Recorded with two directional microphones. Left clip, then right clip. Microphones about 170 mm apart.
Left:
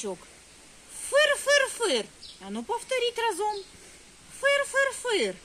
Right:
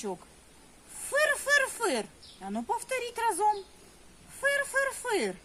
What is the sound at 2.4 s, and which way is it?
Speech, 25° right (ahead or behind).